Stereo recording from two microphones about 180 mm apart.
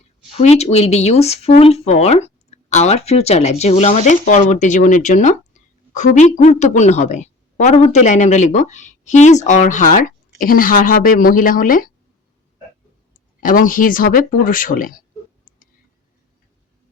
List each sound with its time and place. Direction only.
0.3 s a woman's voice: 35° left (ahead or behind)
13.1 s a woman's voice: 50° left (ahead or behind)